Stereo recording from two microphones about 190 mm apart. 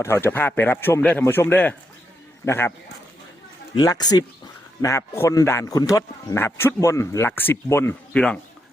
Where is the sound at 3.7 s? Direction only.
20° left (ahead or behind).